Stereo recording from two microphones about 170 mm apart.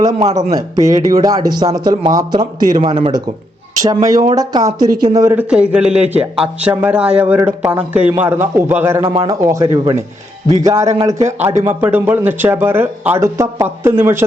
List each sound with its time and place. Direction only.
0.1 s speech: 40° right (ahead or behind)
0.5 s speech: 20° right (ahead or behind)
9.0 s speech: 30° right (ahead or behind)
9.4 s speech: 20° right (ahead or behind)